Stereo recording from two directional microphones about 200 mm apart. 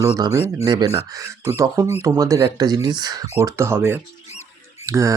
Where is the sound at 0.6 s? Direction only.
25° right (ahead or behind).